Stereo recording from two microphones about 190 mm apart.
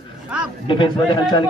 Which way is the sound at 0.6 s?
25° left (ahead or behind).